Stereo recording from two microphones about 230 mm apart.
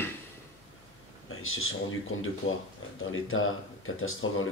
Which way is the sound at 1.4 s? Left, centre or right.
Left.